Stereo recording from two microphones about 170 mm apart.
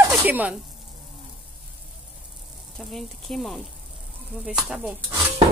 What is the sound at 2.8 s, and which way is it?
Speech, centre (ahead or behind).